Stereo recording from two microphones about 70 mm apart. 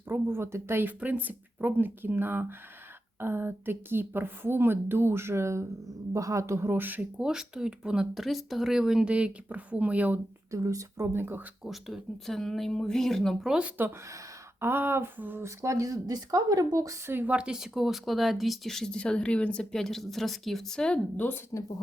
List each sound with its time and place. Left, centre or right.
0.1 s a woman's voice: right
7.2 s speech: centre
10.5 s speech: right
11.6 s speech: centre
13.5 s speech: centre
14.6 s a woman's voice: right
15.4 s speech: right
17.1 s speech: right
17.3 s speech: centre
19.7 s speech: centre
21.5 s speech: left